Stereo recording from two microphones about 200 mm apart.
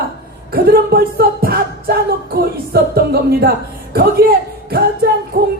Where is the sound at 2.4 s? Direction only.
50° right (ahead or behind).